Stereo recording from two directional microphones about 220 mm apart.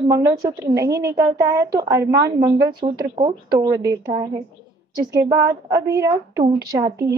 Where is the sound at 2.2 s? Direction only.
45° right (ahead or behind).